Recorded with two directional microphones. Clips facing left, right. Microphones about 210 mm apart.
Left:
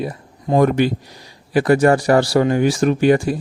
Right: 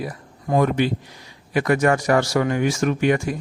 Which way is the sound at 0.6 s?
45° left (ahead or behind).